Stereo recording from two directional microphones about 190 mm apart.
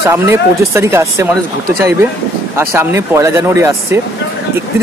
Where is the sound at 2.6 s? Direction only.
15° right (ahead or behind).